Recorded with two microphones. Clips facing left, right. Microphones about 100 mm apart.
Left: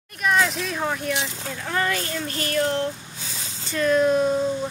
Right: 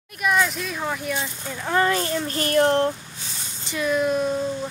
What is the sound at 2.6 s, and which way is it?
Speech, 55° right (ahead or behind).